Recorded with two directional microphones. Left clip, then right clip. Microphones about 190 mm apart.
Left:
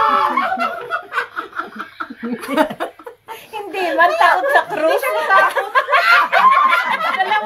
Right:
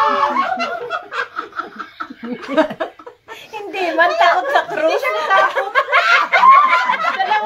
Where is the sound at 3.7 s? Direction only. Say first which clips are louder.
Left 1 dB; centre (ahead or behind).